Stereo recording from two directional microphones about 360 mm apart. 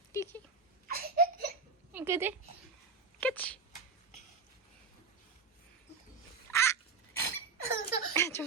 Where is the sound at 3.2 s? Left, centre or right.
Centre.